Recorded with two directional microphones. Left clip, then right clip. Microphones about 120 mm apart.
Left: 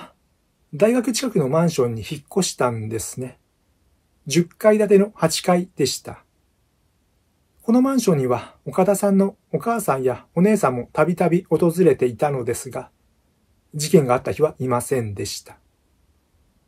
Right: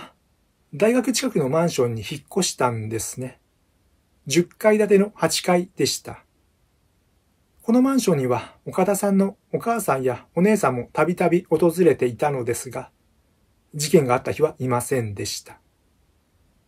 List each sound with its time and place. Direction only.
0.7 s speech: 10° left (ahead or behind)
7.6 s speech: 15° left (ahead or behind)